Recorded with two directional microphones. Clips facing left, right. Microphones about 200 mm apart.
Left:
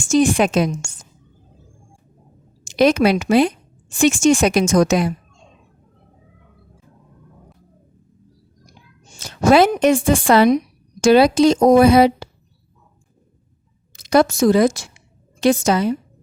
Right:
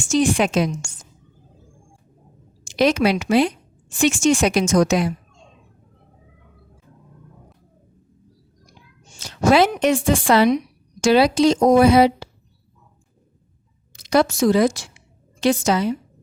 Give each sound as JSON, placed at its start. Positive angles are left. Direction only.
{"t": 0.1, "sound": "speech", "side_deg": 50}
{"t": 2.6, "sound": "speech", "side_deg": 50}
{"t": 9.1, "sound": "speech", "side_deg": 50}
{"t": 14.0, "sound": "a woman's voice", "side_deg": 50}